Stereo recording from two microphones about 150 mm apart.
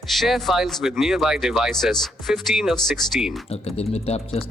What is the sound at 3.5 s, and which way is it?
Speech, 45° left (ahead or behind).